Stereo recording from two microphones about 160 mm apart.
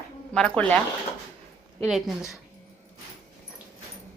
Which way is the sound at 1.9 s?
Centre (ahead or behind).